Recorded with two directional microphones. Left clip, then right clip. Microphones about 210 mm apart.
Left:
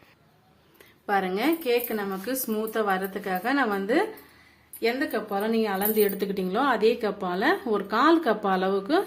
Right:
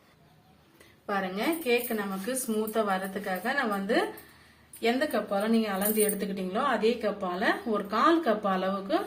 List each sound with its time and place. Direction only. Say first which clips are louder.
1.0 s a woman's voice: left 5 dB; 50° left (ahead or behind)
4.8 s a woman's voice: left 1 dB; 40° left (ahead or behind)